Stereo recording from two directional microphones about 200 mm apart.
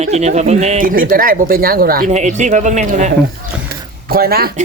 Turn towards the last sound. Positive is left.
turn(degrees=-50)  # may be behind; listen again after turning